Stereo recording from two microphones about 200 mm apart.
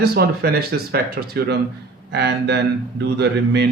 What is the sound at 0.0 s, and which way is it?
Speech, 55° right (ahead or behind).